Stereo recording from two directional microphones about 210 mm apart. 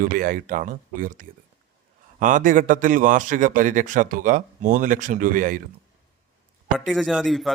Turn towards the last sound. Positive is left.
turn(degrees=0)  # may be behind; listen again after turning